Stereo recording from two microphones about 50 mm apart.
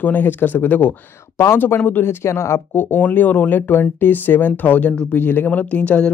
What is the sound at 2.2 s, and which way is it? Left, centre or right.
Speech, left.